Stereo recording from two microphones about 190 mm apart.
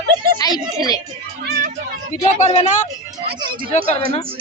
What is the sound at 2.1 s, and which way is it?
Speech, 35° left (ahead or behind).